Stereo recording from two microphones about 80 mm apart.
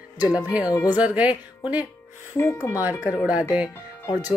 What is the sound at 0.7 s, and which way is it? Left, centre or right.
Speech, left.